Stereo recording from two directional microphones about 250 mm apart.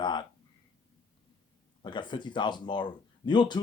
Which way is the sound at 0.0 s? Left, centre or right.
Centre.